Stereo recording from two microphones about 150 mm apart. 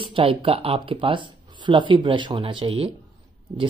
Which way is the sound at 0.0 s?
35° right (ahead or behind).